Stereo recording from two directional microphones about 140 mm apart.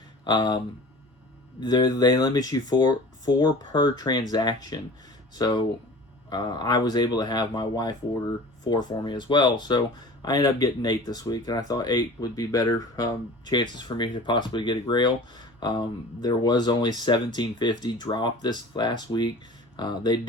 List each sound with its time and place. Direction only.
0.3 s speech: 30° left (ahead or behind)
1.6 s speech: 30° left (ahead or behind)